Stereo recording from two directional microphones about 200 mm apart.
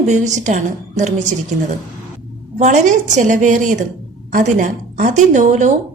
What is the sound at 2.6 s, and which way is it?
A woman's voice, 40° right (ahead or behind).